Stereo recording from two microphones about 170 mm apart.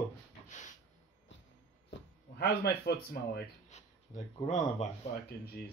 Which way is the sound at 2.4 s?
65° left (ahead or behind).